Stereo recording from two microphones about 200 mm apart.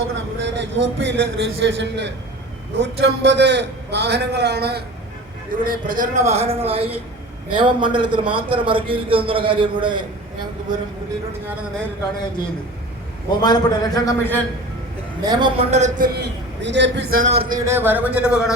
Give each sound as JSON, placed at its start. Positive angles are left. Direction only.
{"t": 0.3, "sound": "a man's voice", "side_deg": -60}
{"t": 13.4, "sound": "a man's voice", "side_deg": 20}
{"t": 15.2, "sound": "a man's voice", "side_deg": -20}
{"t": 16.1, "sound": "a man's voice", "side_deg": -60}
{"t": 17.2, "sound": "a man's voice", "side_deg": -40}
{"t": 17.7, "sound": "a man's voice", "side_deg": -10}